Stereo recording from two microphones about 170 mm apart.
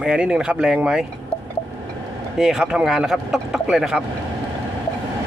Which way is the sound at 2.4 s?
Centre (ahead or behind).